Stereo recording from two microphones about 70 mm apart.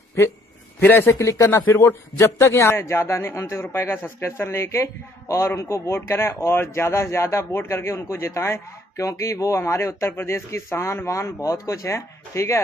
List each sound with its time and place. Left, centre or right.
0.8 s speech: left
1.1 s speech: left
1.9 s speech: left